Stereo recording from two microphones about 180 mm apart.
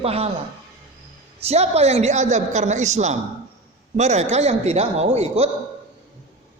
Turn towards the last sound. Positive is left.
turn(degrees=-35)  # may be behind; listen again after turning